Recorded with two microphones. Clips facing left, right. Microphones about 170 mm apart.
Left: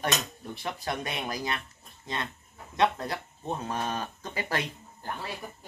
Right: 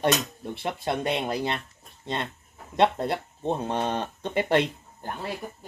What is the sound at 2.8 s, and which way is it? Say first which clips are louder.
Speech: right 4 dB; 25° right (ahead or behind).